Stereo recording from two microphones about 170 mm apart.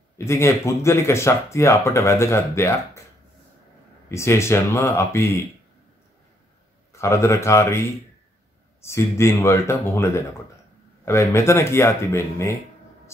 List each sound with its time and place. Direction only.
0.2 s speech: 15° left (ahead or behind)
4.1 s speech: 15° left (ahead or behind)
6.9 s speech: 15° left (ahead or behind)
8.8 s speech: 15° left (ahead or behind)